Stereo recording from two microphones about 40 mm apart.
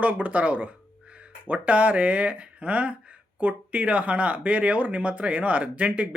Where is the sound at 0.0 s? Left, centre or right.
Right.